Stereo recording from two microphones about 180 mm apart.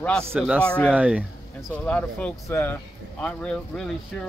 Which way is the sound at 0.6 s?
5° left (ahead or behind).